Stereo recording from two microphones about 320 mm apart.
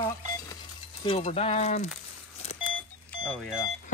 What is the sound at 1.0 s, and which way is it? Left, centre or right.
Vehicle, centre.